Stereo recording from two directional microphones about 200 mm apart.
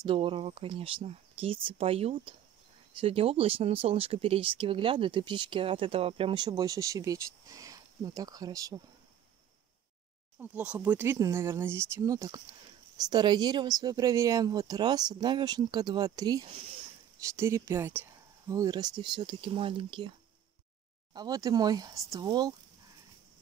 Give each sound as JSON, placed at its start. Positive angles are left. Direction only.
{"t": 0.0, "sound": "speech", "side_deg": -25}
{"t": 10.4, "sound": "speech", "side_deg": -5}
{"t": 21.1, "sound": "speech", "side_deg": -20}